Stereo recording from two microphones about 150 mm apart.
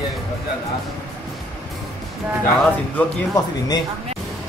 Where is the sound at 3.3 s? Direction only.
25° left (ahead or behind).